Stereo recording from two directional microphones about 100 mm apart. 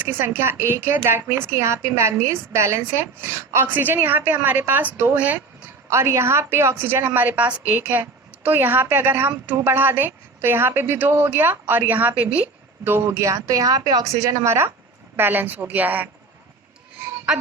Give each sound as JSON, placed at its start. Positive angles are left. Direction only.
{"t": 0.0, "sound": "a woman's voice", "side_deg": -20}
{"t": 5.9, "sound": "a woman's voice", "side_deg": -25}